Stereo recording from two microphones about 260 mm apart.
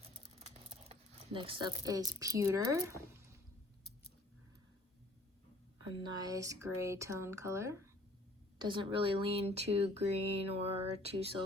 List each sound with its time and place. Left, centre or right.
0.7 s speech: right
6.0 s speech: centre
10.2 s a sound: left
10.4 s speech: right